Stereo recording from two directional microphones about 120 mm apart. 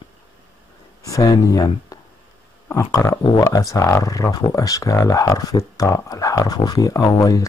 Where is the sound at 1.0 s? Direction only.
30° left (ahead or behind).